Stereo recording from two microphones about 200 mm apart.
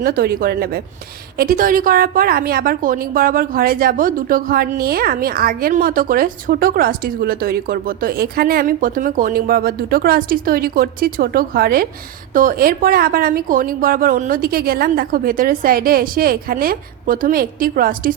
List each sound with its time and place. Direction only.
0.0 s a woman's voice: 45° right (ahead or behind)